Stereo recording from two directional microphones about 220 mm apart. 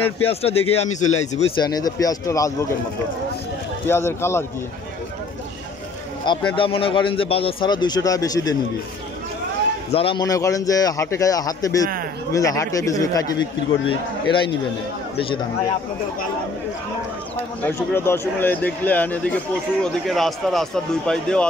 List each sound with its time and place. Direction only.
0.3 s a man's voice: 25° left (ahead or behind)
1.6 s speech: 15° left (ahead or behind)
3.8 s speech: 10° left (ahead or behind)
6.5 s a man's voice: 25° left (ahead or behind)
9.9 s a man's voice: 20° left (ahead or behind)
17.4 s speech: 10° left (ahead or behind)